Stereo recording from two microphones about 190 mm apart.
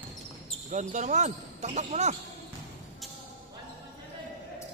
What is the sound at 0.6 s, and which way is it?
Speech, 40° right (ahead or behind).